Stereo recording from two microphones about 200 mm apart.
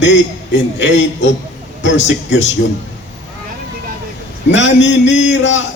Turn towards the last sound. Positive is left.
turn(degrees=65)  # may be behind; listen again after turning